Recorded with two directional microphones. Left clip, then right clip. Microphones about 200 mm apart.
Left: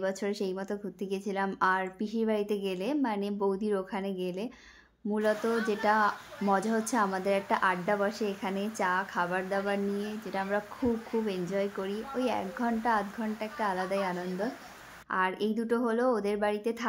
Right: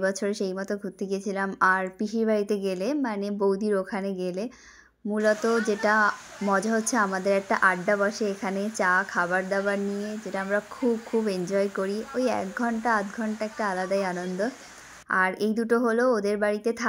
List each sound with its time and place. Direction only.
0.0 s speech: 15° right (ahead or behind)
11.5 s speech: 20° right (ahead or behind)